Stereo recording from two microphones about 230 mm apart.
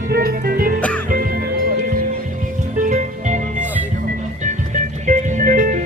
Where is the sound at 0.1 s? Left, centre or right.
Right.